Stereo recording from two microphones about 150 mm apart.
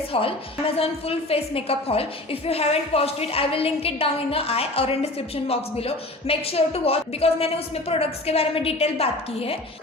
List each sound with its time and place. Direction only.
0.1 s a woman's voice: 40° left (ahead or behind)